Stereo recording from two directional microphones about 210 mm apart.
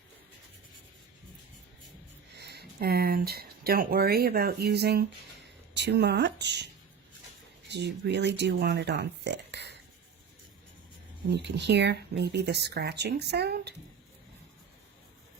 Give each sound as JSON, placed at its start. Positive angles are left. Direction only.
{"t": 2.4, "sound": "speech", "side_deg": -50}
{"t": 7.7, "sound": "speech", "side_deg": -55}
{"t": 11.3, "sound": "speech", "side_deg": -55}